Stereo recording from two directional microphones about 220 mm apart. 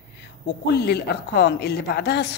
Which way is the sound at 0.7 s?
50° left (ahead or behind).